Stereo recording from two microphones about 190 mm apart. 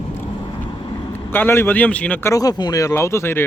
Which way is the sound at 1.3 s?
10° left (ahead or behind).